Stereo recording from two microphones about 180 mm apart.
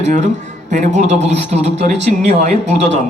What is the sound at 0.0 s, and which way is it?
Speech, 40° right (ahead or behind).